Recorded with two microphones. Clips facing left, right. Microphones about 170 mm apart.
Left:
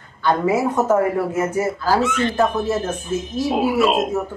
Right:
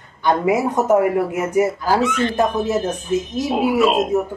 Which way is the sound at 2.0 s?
Centre (ahead or behind).